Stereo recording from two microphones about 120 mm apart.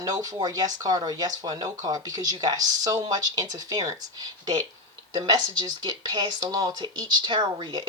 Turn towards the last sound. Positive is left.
turn(degrees=-35)  # may be behind; listen again after turning